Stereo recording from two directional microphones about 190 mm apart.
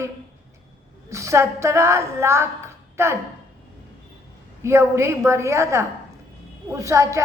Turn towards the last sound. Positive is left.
turn(degrees=-15)  # may be behind; listen again after turning